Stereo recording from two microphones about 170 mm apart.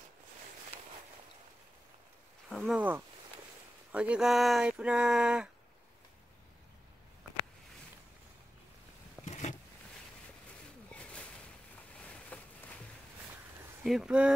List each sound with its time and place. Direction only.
2.5 s speech: 5° left (ahead or behind)
3.9 s speech: 5° right (ahead or behind)
9.2 s vehicle: 45° left (ahead or behind)
10.9 s a sound: 5° left (ahead or behind)
13.8 s speech: 5° right (ahead or behind)